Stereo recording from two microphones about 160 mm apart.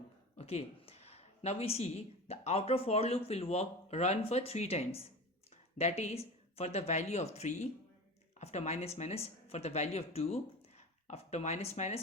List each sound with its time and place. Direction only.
0.3 s speech: 40° left (ahead or behind)